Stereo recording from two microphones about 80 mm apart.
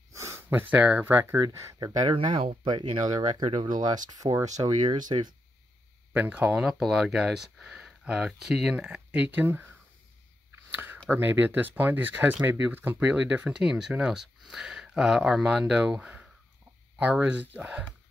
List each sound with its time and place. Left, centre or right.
0.1 s a sound: right
0.7 s speech: centre
1.0 s speech: right
1.8 s speech: right
6.1 s speech: centre
10.7 s a sound: right
11.1 s speech: right